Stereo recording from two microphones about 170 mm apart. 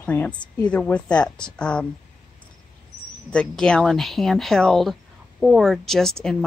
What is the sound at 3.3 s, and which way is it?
A woman's voice, 5° left (ahead or behind).